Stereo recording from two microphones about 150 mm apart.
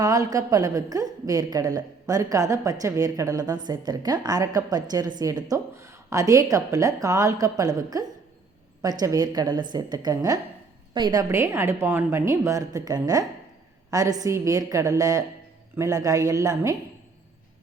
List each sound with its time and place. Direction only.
0.0 s a woman's voice: 25° right (ahead or behind)